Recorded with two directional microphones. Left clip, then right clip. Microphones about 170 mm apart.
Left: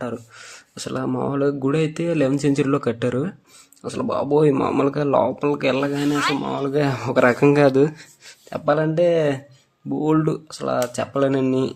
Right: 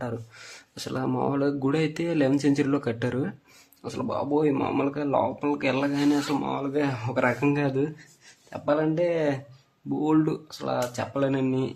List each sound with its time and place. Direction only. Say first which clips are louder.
0.0 s speech: left 4 dB; 15° left (ahead or behind); by 11.7 s 35° left (ahead or behind)